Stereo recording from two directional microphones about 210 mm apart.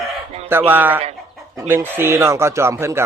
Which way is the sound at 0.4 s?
10° right (ahead or behind).